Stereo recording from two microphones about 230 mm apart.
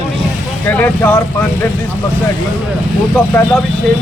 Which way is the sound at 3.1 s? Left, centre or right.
Centre.